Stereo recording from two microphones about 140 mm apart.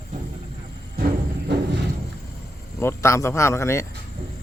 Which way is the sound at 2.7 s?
20° left (ahead or behind).